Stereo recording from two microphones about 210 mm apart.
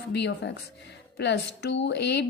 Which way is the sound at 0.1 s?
55° left (ahead or behind).